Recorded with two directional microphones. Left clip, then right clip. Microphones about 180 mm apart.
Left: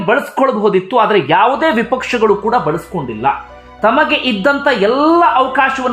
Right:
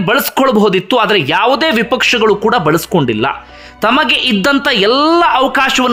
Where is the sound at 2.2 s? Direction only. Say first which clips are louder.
Right 1 dB; 30° right (ahead or behind).